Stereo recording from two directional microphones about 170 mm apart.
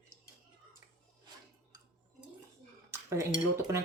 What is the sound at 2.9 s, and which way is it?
Dishes, 15° right (ahead or behind).